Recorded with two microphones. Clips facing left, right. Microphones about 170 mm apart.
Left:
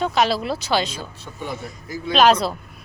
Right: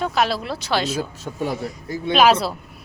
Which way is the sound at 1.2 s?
35° right (ahead or behind).